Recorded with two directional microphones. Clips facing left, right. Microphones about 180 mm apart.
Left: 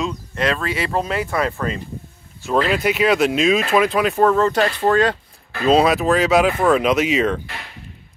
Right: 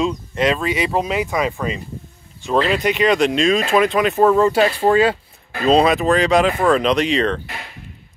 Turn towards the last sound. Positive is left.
turn(degrees=5)  # may be behind; listen again after turning